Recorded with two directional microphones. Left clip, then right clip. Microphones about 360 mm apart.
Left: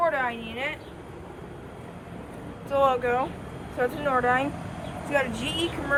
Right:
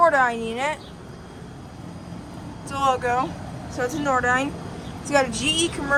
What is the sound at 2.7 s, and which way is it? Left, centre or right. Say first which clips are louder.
A woman's voice: right 1 dB; centre.